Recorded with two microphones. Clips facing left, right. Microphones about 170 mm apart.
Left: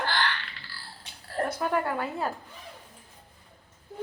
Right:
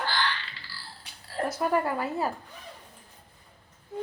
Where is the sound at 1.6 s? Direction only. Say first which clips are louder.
Right 4 dB; 5° right (ahead or behind).